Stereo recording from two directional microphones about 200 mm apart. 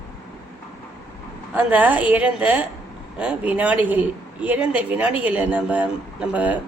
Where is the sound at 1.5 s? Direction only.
5° right (ahead or behind).